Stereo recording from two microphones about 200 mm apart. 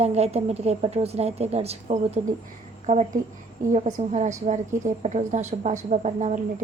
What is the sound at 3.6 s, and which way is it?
Speech, 40° right (ahead or behind).